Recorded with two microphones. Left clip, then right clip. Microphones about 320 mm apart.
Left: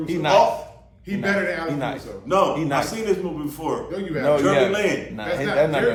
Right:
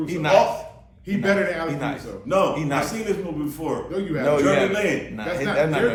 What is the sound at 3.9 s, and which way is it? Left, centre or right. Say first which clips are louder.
Speech: right 1 dB; centre.